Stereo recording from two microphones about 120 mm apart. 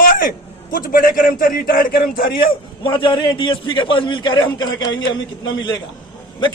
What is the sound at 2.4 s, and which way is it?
A man's voice, 45° left (ahead or behind).